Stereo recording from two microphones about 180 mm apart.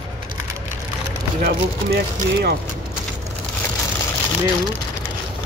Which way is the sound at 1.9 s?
60° right (ahead or behind).